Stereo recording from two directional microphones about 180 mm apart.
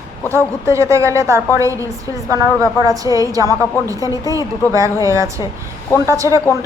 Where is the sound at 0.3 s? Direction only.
15° right (ahead or behind).